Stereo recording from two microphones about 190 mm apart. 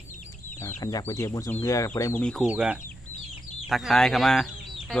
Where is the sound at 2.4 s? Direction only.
5° right (ahead or behind).